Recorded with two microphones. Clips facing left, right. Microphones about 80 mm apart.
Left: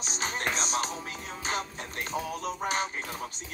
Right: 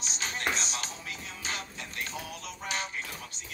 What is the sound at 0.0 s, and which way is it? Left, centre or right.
Music, left.